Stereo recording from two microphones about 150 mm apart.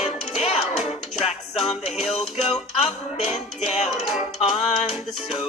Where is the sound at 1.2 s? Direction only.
40° left (ahead or behind).